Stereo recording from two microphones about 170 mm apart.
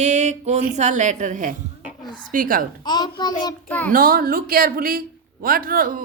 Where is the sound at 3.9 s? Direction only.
60° right (ahead or behind).